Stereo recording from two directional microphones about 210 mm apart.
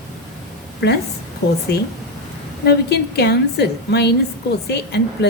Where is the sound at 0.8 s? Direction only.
55° left (ahead or behind).